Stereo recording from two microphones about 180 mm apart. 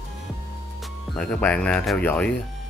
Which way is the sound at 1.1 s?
5° left (ahead or behind).